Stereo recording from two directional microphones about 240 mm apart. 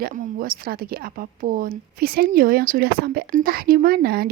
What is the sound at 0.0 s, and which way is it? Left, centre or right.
Speech, right.